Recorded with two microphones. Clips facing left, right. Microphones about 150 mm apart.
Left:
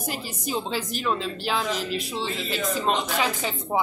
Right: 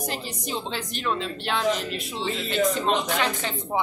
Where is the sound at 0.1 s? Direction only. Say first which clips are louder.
Left 1 dB; 5° left (ahead or behind).